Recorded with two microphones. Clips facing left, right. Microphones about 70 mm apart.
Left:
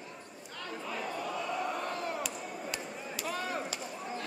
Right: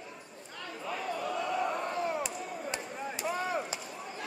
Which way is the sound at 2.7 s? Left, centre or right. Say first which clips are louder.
Right 2 dB; right.